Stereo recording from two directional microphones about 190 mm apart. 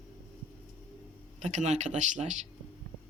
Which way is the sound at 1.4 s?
35° right (ahead or behind).